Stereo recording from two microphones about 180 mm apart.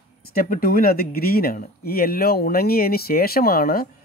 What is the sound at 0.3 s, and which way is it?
Speech, 55° left (ahead or behind).